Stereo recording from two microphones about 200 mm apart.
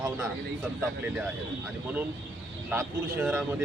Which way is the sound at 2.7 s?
10° right (ahead or behind).